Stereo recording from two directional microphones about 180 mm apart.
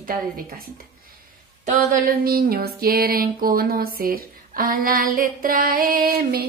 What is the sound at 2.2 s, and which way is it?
Music, 55° right (ahead or behind).